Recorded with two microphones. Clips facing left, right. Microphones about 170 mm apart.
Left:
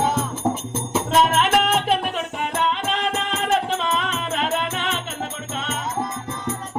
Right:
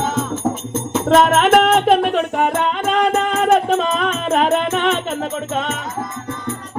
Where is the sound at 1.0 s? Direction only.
50° right (ahead or behind).